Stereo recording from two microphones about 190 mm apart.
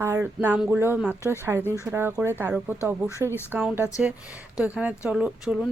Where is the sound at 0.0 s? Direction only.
15° right (ahead or behind).